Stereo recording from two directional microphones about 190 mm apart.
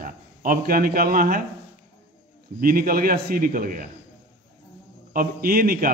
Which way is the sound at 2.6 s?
50° right (ahead or behind).